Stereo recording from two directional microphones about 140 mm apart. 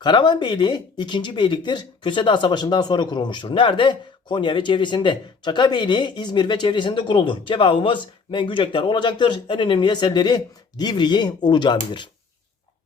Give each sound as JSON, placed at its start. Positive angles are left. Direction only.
{"t": 0.0, "sound": "speech", "side_deg": 35}